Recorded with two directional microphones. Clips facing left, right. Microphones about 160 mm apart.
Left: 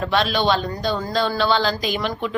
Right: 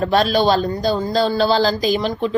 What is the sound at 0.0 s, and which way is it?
A woman's voice, 40° right (ahead or behind).